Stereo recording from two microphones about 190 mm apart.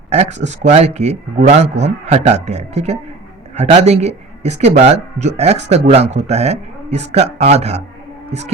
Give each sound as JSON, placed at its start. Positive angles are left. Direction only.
{"t": 0.1, "sound": "speech", "side_deg": -35}
{"t": 8.3, "sound": "heart sounds", "side_deg": -35}